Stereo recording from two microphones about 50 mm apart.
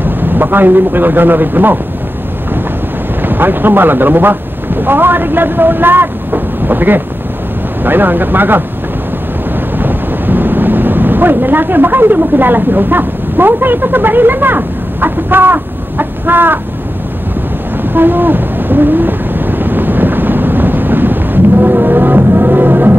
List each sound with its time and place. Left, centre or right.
0.0 s a man's voice: right
3.2 s speech: right
9.8 s speech: right
17.9 s a sound: right